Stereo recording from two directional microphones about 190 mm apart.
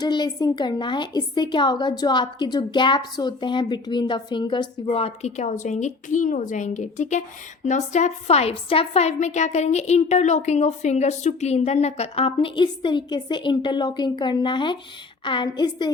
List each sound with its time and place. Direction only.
0.0 s a woman's voice: 20° left (ahead or behind)